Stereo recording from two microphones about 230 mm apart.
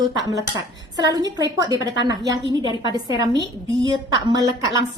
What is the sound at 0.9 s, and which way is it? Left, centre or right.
A woman's voice, centre.